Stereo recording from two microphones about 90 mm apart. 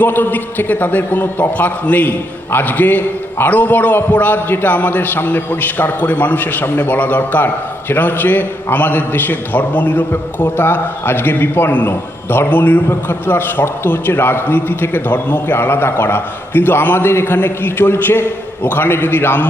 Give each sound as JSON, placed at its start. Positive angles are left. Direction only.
{"t": 0.0, "sound": "a man's voice", "side_deg": 20}